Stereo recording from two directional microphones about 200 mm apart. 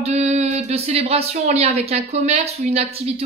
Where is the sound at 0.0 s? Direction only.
30° right (ahead or behind).